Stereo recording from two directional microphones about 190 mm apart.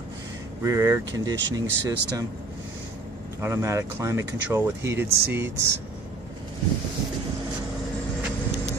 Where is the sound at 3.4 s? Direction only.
15° right (ahead or behind).